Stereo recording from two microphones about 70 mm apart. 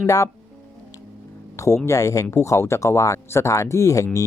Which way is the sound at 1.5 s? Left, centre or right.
Left.